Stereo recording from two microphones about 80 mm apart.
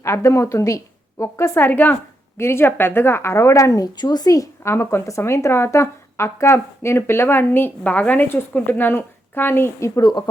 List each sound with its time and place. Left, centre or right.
0.0 s a woman's voice: left
4.7 s speech: left
10.0 s speech: left